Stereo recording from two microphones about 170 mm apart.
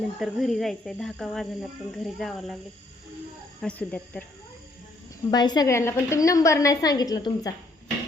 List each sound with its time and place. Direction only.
0.2 s speech: centre (ahead or behind)
3.6 s speech: 5° left (ahead or behind)
5.3 s a woman's voice: 25° left (ahead or behind)